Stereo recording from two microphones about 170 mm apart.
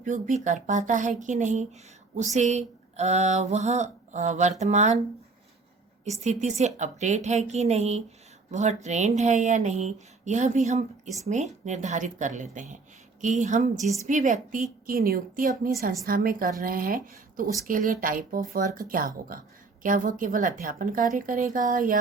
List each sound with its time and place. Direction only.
0.0 s a woman's voice: 45° right (ahead or behind)
6.1 s a woman's voice: 40° right (ahead or behind)
14.8 s a woman's voice: 60° right (ahead or behind)